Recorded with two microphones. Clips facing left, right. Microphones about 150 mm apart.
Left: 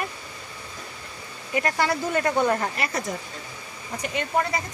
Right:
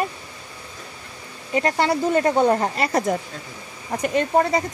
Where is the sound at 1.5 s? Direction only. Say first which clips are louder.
Right 4 dB; 30° right (ahead or behind).